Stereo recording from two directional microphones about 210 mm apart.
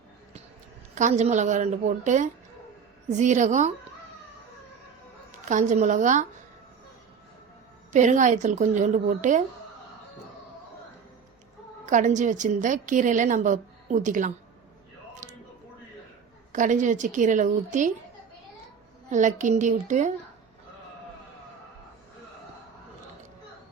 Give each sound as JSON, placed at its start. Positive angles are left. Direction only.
{"t": 0.9, "sound": "a woman's voice", "side_deg": -35}
{"t": 5.5, "sound": "a woman's voice", "side_deg": -35}
{"t": 7.9, "sound": "a woman's voice", "side_deg": -35}
{"t": 11.9, "sound": "a woman's voice", "side_deg": -35}
{"t": 15.2, "sound": "a sound", "side_deg": -35}
{"t": 16.5, "sound": "a woman's voice", "side_deg": -35}
{"t": 19.1, "sound": "a woman's voice", "side_deg": -35}